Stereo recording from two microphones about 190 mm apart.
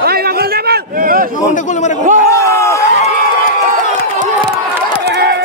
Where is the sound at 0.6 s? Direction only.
55° right (ahead or behind).